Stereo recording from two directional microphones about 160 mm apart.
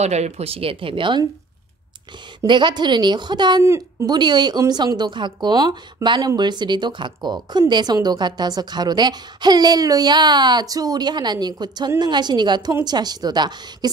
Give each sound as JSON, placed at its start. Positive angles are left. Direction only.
{"t": 0.0, "sound": "speech", "side_deg": -45}
{"t": 2.4, "sound": "speech", "side_deg": -30}